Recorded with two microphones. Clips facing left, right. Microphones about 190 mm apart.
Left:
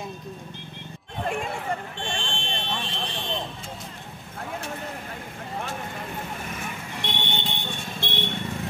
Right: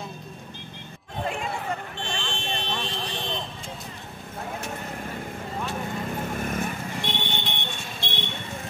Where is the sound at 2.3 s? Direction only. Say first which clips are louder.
Right 1 dB; 40° right (ahead or behind).